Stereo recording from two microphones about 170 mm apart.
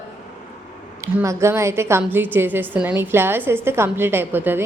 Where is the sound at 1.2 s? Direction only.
15° right (ahead or behind).